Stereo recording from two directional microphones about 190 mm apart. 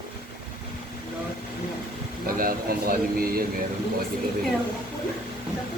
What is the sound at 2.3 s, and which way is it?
Speech, 50° right (ahead or behind).